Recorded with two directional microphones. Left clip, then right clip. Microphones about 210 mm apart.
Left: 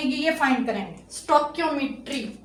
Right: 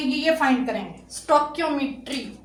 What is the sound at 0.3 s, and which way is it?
Speech, 20° left (ahead or behind).